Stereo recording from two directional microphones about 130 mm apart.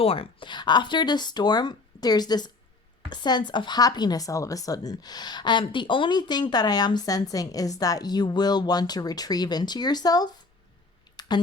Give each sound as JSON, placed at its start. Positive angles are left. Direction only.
{"t": 0.0, "sound": "speech", "side_deg": 45}